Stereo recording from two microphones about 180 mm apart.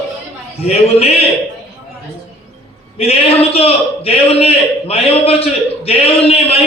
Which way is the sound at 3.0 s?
35° left (ahead or behind).